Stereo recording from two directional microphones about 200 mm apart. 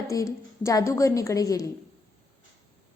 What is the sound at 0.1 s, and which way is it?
A woman's voice, 15° left (ahead or behind).